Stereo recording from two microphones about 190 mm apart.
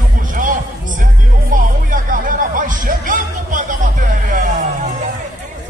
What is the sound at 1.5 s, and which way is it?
Music, 45° right (ahead or behind).